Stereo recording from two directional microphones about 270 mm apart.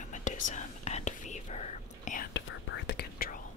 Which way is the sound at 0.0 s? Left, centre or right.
Left.